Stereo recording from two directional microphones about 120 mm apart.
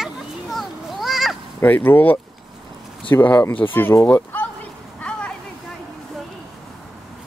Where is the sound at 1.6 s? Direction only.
15° left (ahead or behind).